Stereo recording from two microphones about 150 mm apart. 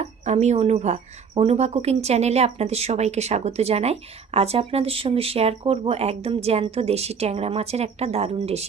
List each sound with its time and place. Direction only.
0.0 s speech: 45° right (ahead or behind)